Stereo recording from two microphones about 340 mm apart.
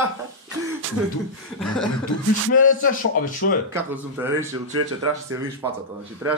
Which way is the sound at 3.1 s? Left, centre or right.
Left.